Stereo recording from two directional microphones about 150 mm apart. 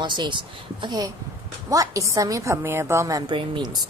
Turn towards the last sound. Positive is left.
turn(degrees=-30)  # may be behind; listen again after turning